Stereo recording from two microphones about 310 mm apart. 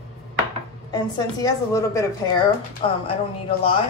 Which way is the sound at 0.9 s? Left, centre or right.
Centre.